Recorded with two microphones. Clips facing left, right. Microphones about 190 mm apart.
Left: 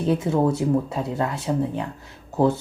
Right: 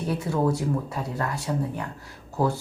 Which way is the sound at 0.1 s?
25° left (ahead or behind).